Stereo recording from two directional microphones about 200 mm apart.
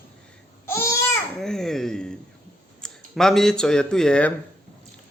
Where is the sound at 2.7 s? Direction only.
Centre (ahead or behind).